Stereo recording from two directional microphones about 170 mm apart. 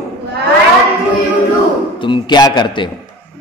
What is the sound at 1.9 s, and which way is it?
Speech, 30° left (ahead or behind).